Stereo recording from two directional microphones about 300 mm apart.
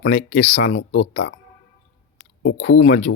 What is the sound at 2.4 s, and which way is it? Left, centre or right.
Speech, left.